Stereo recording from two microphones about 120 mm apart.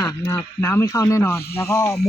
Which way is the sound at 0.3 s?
25° left (ahead or behind).